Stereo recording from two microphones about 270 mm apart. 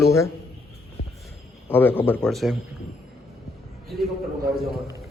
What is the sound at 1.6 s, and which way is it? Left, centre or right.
Speech, centre.